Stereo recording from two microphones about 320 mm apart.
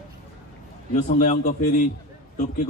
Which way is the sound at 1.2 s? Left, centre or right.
Left.